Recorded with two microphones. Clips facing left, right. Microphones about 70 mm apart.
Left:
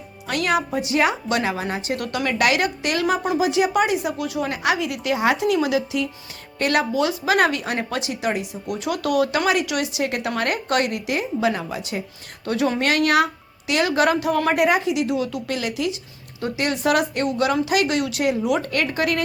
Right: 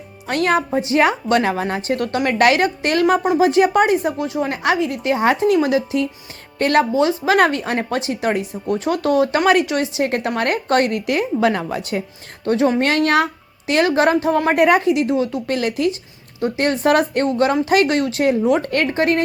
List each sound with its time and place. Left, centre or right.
0.3 s a woman's voice: right
12.5 s a woman's voice: right
15.1 s a woman's voice: right